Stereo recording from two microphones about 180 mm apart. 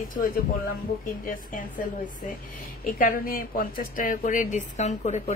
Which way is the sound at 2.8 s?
50° left (ahead or behind).